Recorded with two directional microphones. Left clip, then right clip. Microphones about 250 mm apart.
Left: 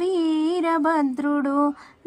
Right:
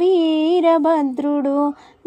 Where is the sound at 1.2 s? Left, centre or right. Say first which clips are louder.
Right 3 dB; left.